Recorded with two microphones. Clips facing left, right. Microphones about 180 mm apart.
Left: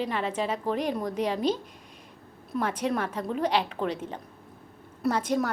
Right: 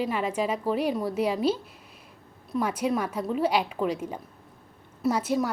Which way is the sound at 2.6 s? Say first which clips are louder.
Right 1 dB; 10° right (ahead or behind).